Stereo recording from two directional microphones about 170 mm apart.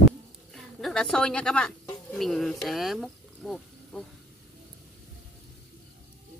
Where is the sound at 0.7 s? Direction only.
Centre (ahead or behind).